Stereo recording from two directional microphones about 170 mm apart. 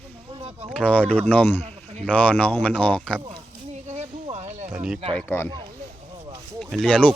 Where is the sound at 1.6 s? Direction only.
40° right (ahead or behind).